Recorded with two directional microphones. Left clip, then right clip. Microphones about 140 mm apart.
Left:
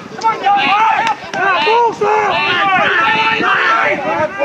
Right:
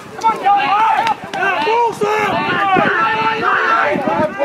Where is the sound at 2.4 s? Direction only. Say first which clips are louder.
Left 2 dB; 15° left (ahead or behind).